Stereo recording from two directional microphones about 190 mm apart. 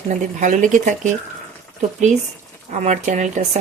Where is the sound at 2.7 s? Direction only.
40° right (ahead or behind).